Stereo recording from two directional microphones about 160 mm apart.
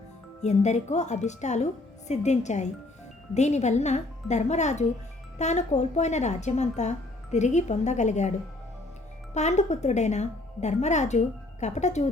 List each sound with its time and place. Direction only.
0.4 s speech: 45° left (ahead or behind)
9.3 s speech: 45° left (ahead or behind)